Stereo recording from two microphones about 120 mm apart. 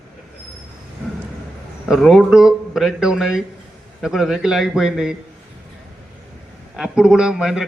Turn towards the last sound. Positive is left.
turn(degrees=-5)  # may be behind; listen again after turning